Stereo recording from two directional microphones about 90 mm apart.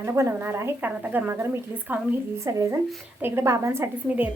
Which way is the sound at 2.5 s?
35° right (ahead or behind).